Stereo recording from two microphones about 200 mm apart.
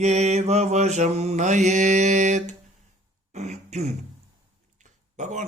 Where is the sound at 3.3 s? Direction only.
35° right (ahead or behind).